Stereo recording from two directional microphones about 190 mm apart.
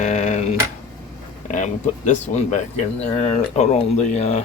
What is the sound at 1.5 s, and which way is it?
Speech, 40° left (ahead or behind).